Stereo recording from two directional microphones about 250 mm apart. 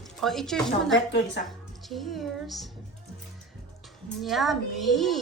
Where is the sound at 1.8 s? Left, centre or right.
Centre.